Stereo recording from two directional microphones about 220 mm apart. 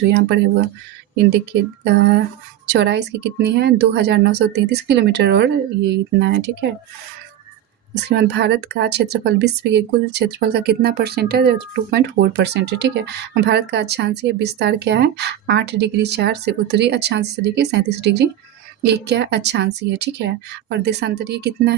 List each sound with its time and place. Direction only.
0.1 s speech: 50° right (ahead or behind)
2.6 s speech: 50° right (ahead or behind)
8.0 s speech: 50° right (ahead or behind)